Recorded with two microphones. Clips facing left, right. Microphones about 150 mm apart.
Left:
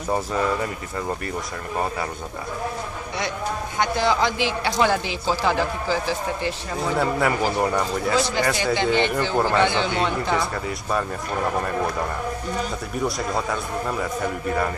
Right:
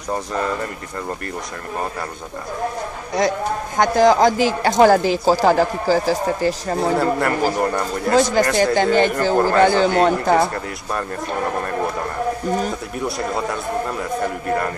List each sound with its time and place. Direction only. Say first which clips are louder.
3.2 s a man's voice: right 8 dB; 45° right (ahead or behind)
7.0 s speech: right 3 dB; centre (ahead or behind)
8.1 s speech: right 8 dB; 45° right (ahead or behind)